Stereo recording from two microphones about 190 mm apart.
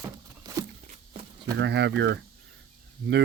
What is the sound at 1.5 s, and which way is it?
Speech, 65° right (ahead or behind).